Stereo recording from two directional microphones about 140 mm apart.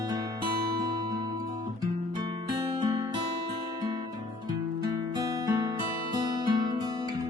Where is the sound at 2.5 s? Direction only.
30° right (ahead or behind).